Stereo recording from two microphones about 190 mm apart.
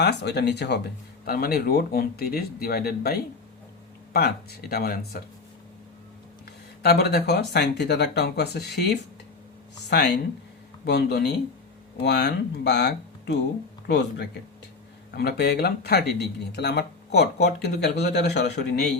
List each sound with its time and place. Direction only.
0.0 s speech: 60° left (ahead or behind)
6.8 s speech: 60° left (ahead or behind)